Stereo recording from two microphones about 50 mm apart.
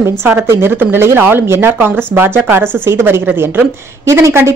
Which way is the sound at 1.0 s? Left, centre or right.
Right.